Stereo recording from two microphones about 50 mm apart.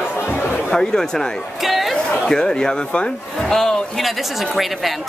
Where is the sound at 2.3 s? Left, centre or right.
Centre.